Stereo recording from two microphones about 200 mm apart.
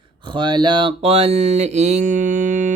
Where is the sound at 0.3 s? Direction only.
20° right (ahead or behind).